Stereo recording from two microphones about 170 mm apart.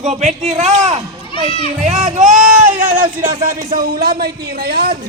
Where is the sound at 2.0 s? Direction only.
45° right (ahead or behind); by 4.9 s 65° right (ahead or behind).